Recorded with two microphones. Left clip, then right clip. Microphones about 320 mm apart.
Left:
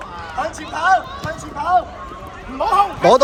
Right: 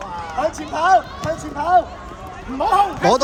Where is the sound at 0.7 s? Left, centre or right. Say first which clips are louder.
Even; right.